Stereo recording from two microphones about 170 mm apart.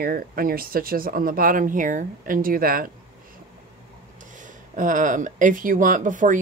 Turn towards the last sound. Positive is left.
turn(degrees=-50)  # may be behind; listen again after turning